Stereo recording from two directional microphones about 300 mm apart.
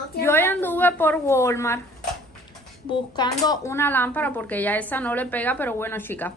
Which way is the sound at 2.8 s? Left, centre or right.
Centre.